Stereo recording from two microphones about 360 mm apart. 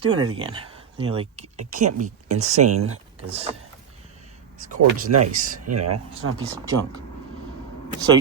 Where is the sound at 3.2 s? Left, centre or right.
Centre.